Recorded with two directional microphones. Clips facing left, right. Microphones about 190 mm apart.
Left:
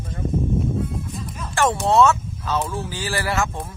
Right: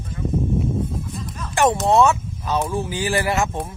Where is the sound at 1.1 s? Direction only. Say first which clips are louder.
Even; 10° left (ahead or behind).